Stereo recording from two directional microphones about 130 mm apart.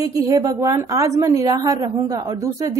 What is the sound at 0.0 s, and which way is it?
A woman's voice, 25° right (ahead or behind).